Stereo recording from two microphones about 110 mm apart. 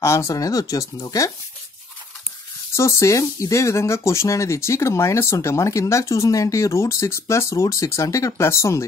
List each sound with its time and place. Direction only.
0.0 s speech: 25° left (ahead or behind)
2.7 s speech: 25° left (ahead or behind)